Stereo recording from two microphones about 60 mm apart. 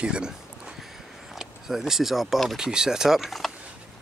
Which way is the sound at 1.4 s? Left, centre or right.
Centre.